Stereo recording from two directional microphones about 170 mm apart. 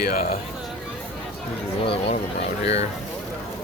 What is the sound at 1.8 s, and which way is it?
Speech, 35° left (ahead or behind).